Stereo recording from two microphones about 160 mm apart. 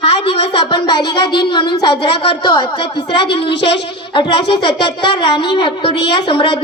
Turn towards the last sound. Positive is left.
turn(degrees=30)  # may be behind; listen again after turning